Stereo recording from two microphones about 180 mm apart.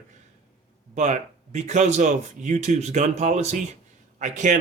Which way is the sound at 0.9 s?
40° right (ahead or behind).